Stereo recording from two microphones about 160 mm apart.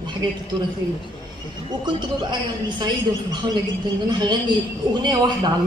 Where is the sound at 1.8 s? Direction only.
30° right (ahead or behind).